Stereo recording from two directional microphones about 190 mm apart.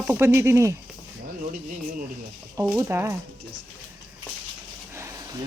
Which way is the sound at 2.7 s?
15° right (ahead or behind).